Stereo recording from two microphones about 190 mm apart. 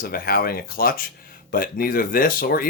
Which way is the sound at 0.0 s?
50° left (ahead or behind).